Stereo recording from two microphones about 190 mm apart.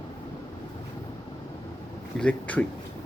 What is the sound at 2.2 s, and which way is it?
Speech, 5° left (ahead or behind).